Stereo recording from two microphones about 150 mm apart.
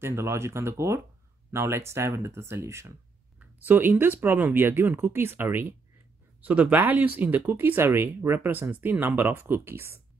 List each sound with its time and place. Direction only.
0.0 s speech: 15° right (ahead or behind)